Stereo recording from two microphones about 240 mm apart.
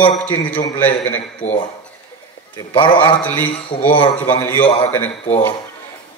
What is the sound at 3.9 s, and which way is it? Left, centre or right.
A man's voice, left.